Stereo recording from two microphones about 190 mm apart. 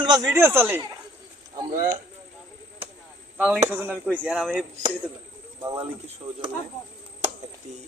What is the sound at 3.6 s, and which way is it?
Speech, 10° right (ahead or behind).